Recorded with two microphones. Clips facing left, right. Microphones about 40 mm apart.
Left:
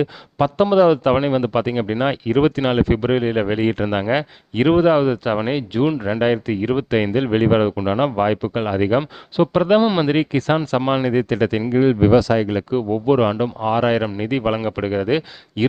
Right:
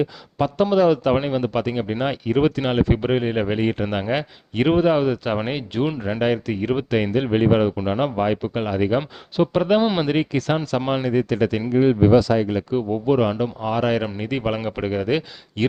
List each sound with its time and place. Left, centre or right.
0.0 s a man's voice: left
5.3 s speech: centre
6.9 s speech: left
10.1 s a man's voice: left
11.1 s speech: left
11.9 s speech: left
12.7 s a man's voice: left